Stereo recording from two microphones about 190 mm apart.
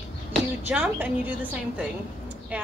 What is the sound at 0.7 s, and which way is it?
Speech, 10° right (ahead or behind).